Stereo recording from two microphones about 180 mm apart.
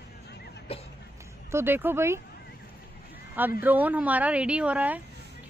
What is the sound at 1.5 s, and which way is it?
Speech, 10° right (ahead or behind).